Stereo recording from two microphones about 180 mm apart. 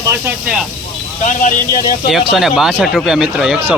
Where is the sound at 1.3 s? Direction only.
50° left (ahead or behind).